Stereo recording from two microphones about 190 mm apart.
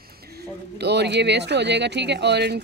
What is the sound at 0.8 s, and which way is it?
Speech, 60° right (ahead or behind).